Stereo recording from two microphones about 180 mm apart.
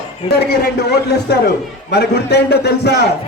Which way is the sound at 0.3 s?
65° left (ahead or behind).